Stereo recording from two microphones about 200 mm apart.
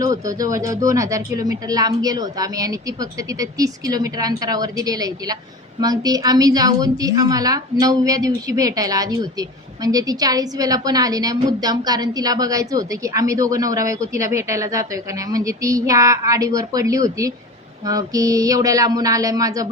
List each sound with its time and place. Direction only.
0.0 s a woman's voice: 15° right (ahead or behind)